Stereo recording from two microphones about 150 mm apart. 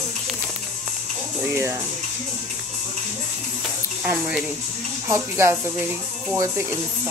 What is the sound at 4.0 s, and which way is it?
Speech, 10° right (ahead or behind).